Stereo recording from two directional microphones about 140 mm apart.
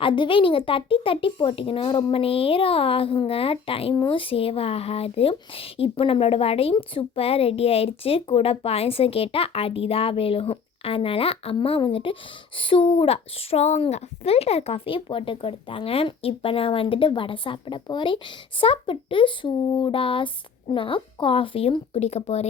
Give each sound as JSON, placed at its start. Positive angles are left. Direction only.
{"t": 0.0, "sound": "a child's voice", "side_deg": 40}